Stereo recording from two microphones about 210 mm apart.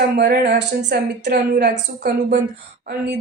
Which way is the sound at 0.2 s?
50° right (ahead or behind).